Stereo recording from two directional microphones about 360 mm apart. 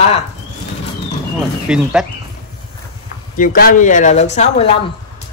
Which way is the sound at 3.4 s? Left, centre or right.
Left.